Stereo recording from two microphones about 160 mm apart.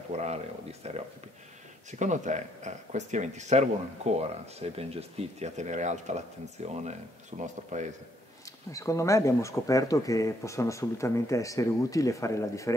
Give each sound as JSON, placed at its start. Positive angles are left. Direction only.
{"t": 0.1, "sound": "speech", "side_deg": -40}
{"t": 8.7, "sound": "speech", "side_deg": 20}